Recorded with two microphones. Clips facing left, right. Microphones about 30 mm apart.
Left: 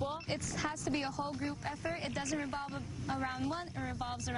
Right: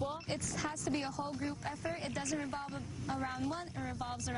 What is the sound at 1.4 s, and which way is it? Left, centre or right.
A woman's voice, centre.